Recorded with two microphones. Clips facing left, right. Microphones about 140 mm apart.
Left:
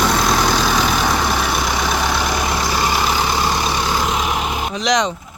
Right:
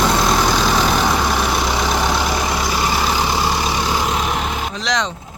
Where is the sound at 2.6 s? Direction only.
Centre (ahead or behind).